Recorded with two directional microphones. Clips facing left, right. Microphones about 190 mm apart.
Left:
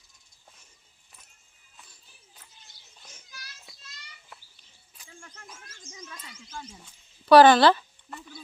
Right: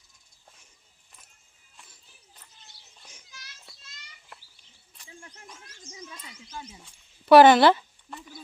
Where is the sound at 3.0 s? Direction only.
15° right (ahead or behind).